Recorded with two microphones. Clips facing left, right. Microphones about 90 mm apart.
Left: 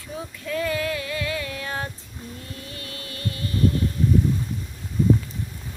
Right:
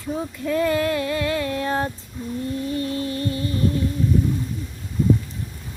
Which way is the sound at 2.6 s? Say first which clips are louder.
Right 13 dB; 30° right (ahead or behind).